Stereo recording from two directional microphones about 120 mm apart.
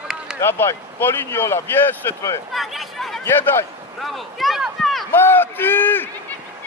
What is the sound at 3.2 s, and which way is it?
Speech, 20° left (ahead or behind).